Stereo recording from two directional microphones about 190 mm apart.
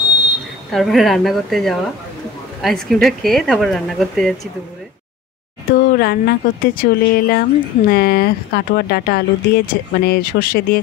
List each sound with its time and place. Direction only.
0.7 s speech: centre (ahead or behind)
5.7 s speech: 55° left (ahead or behind)